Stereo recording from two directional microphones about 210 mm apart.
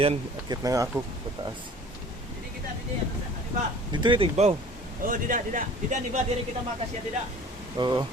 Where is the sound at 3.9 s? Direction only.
20° right (ahead or behind).